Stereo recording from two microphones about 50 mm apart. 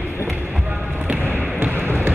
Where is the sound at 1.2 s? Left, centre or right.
Left.